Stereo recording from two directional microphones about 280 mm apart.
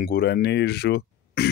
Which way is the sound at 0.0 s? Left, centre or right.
Left.